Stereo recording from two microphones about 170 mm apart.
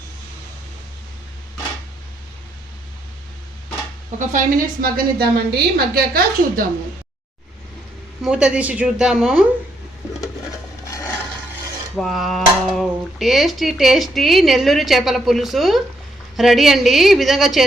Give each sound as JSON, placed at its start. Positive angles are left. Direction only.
{"t": 4.3, "sound": "a woman's voice", "side_deg": -50}
{"t": 8.2, "sound": "speech", "side_deg": -5}
{"t": 11.9, "sound": "speech", "side_deg": 0}